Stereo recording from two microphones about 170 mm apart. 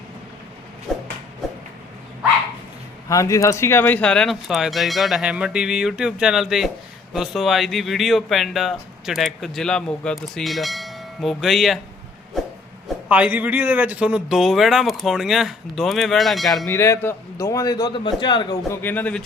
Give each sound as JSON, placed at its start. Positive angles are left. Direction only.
{"t": 0.9, "sound": "a sound", "side_deg": 0}
{"t": 3.1, "sound": "speech", "side_deg": 20}
{"t": 13.1, "sound": "speech", "side_deg": -10}
{"t": 16.6, "sound": "a man's voice", "side_deg": 15}
{"t": 18.7, "sound": "speech", "side_deg": 10}